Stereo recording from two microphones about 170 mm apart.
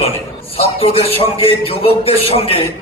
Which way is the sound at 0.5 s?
35° left (ahead or behind).